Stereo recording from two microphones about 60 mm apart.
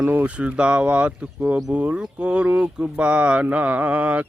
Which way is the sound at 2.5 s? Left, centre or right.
Right.